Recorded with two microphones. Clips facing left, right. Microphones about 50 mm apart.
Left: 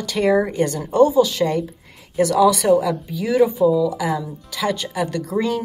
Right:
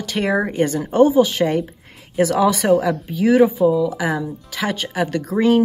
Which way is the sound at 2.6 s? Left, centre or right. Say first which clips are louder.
Even; right.